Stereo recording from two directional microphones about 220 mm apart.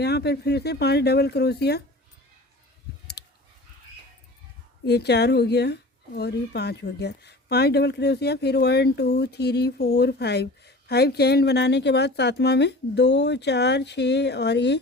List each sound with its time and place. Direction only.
0.0 s speech: 50° left (ahead or behind)
3.2 s fowl: 45° left (ahead or behind)
4.9 s speech: 50° left (ahead or behind)